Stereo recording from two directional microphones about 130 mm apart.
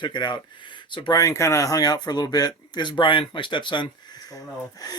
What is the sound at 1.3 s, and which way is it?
Speech, 25° left (ahead or behind).